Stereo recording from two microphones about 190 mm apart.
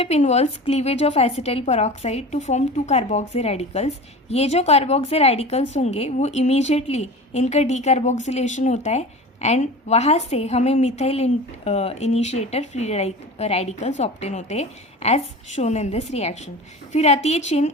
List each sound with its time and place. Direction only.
0.0 s a woman's voice: 35° left (ahead or behind)